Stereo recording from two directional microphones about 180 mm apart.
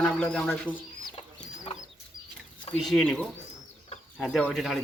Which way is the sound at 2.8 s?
Centre (ahead or behind).